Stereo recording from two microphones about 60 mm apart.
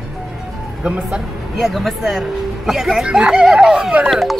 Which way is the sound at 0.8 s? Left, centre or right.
Centre.